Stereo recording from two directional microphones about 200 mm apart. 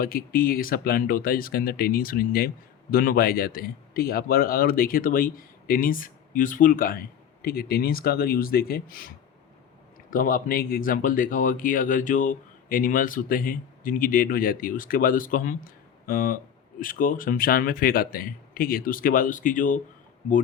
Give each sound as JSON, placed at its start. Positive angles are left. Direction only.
{"t": 0.0, "sound": "speech", "side_deg": 45}